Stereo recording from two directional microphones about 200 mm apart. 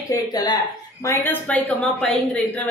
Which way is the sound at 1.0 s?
10° left (ahead or behind).